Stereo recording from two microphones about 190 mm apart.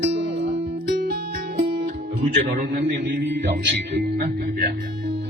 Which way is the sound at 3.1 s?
65° right (ahead or behind).